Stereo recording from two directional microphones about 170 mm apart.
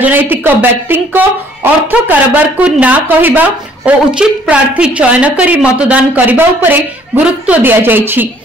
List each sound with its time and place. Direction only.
0.0 s speech: 10° right (ahead or behind)